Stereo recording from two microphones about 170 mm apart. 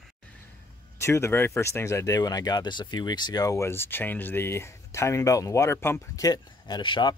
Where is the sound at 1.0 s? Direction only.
15° left (ahead or behind).